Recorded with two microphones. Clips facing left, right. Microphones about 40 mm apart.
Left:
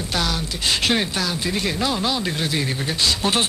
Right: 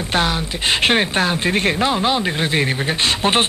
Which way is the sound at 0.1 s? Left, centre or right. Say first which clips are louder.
Right 6 dB; right.